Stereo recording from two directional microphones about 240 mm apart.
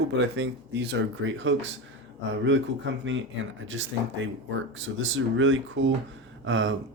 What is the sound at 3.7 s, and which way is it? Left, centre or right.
Speech, right.